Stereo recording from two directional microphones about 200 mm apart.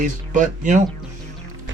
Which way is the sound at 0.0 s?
40° right (ahead or behind).